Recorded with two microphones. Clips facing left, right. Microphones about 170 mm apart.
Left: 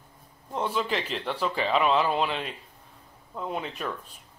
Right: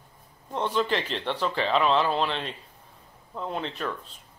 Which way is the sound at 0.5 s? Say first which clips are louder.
Right 2 dB; 5° left (ahead or behind).